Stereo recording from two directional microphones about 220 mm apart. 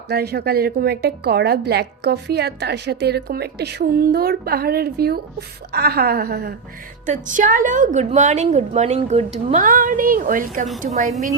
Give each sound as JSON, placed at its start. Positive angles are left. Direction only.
{"t": 0.1, "sound": "a woman's voice", "side_deg": -45}
{"t": 7.0, "sound": "a woman's voice", "side_deg": -35}